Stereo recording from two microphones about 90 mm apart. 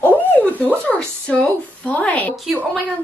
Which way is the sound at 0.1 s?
15° left (ahead or behind).